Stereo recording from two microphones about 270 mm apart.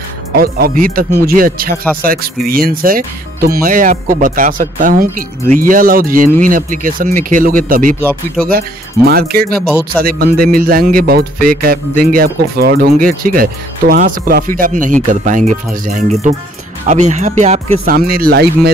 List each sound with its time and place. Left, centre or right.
0.4 s speech: right